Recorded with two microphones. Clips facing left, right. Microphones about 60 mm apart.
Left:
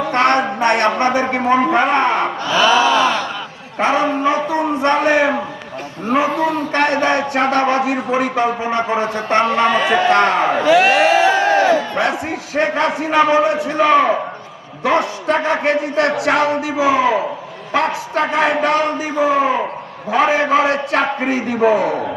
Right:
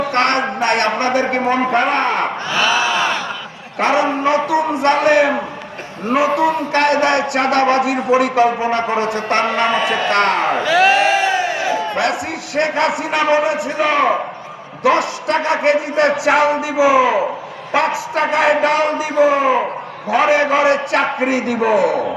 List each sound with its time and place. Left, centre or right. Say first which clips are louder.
0.1 s a sound: left 3 dB; centre
0.7 s a man's voice: left 1 dB; centre
3.8 s a man's voice: right 1 dB; centre
4.3 s speech: right 1 dB; right
4.8 s a man's voice: right 1 dB; centre
15.3 s a man's voice: right 1 dB; centre